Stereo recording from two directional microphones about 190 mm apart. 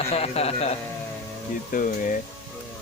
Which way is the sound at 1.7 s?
45° left (ahead or behind).